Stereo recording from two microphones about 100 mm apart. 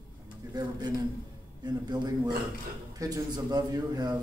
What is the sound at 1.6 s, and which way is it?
Speech, 45° right (ahead or behind).